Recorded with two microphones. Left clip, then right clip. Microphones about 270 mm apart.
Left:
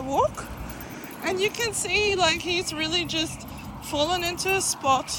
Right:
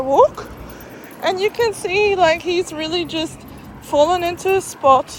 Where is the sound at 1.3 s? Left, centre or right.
Centre.